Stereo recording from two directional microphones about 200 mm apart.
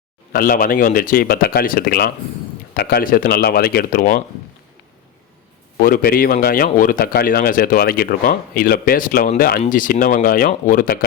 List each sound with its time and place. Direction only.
0.3 s speech: 45° left (ahead or behind)
5.8 s speech: 45° left (ahead or behind)